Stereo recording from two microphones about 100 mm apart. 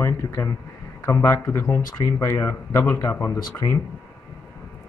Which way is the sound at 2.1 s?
30° left (ahead or behind).